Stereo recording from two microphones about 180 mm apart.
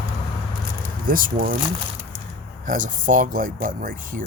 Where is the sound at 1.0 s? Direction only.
50° right (ahead or behind).